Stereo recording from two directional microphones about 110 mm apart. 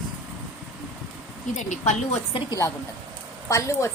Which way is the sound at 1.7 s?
90° left.